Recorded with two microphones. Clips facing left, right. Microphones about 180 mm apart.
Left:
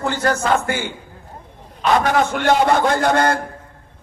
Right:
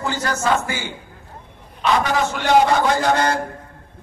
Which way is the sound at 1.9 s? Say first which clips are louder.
Left 4 dB; 50° left (ahead or behind).